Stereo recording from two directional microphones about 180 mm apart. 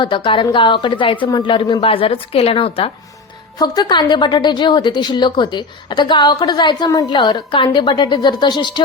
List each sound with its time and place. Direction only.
0.0 s a woman's voice: 25° left (ahead or behind)